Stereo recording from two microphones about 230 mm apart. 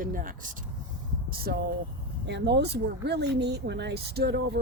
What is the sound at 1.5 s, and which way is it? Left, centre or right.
Speech, right.